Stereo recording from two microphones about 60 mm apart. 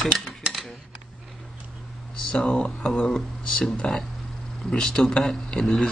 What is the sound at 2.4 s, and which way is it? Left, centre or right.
Speech, centre.